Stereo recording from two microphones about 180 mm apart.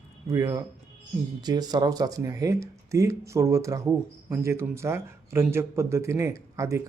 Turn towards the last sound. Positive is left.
turn(degrees=-15)  # may be behind; listen again after turning